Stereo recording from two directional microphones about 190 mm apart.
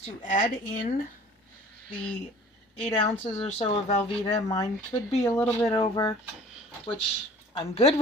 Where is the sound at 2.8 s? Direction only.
30° left (ahead or behind).